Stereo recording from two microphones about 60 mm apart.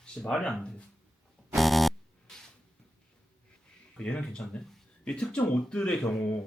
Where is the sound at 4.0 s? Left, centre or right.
Centre.